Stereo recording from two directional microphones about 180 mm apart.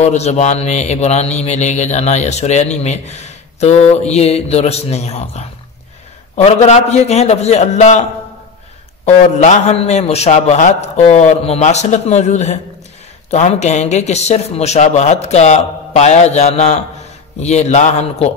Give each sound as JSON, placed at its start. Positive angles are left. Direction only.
{"t": 0.0, "sound": "speech", "side_deg": 40}
{"t": 9.0, "sound": "speech", "side_deg": 40}